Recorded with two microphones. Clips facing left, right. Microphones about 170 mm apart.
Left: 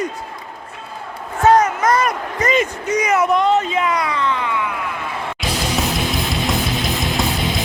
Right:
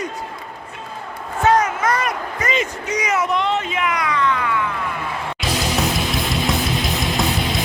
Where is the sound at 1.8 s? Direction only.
40° left (ahead or behind); by 4.7 s 20° left (ahead or behind).